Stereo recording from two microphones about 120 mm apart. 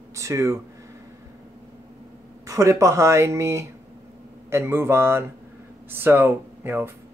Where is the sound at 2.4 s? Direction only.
25° right (ahead or behind).